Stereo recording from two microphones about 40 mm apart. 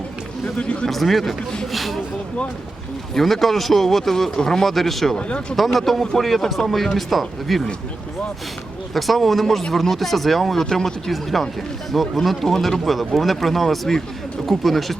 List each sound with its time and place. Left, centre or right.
0.4 s a man's voice: left
0.9 s speech: centre
3.2 s speech: centre
5.1 s speech: left
5.5 s speech: centre
8.9 s speech: centre
11.1 s speech: centre